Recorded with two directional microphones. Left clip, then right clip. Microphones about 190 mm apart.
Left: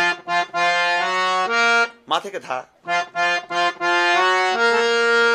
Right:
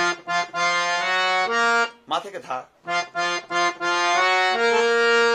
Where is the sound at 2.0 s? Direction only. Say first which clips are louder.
Left 4 dB; 45° left (ahead or behind).